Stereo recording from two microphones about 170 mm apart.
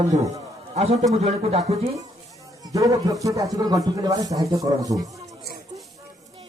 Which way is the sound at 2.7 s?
20° right (ahead or behind).